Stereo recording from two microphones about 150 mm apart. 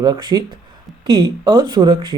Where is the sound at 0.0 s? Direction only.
30° right (ahead or behind).